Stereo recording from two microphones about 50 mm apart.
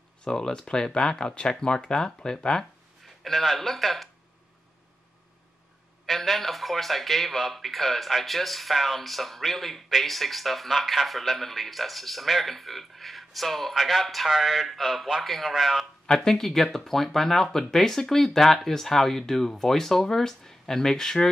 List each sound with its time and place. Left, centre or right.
0.2 s speech: centre
3.3 s a man's voice: centre
6.0 s a man's voice: centre
16.1 s speech: centre